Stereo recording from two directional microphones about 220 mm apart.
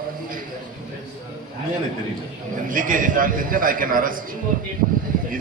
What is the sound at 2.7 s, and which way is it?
Speech, 40° right (ahead or behind).